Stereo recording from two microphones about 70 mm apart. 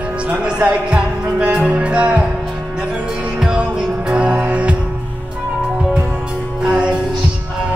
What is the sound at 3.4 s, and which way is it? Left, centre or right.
Music, centre.